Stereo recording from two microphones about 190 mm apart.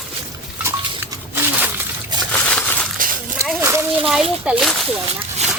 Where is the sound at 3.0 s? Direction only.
45° right (ahead or behind).